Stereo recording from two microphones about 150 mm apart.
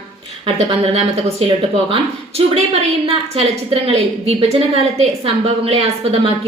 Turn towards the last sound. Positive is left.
turn(degrees=-40)  # may be behind; listen again after turning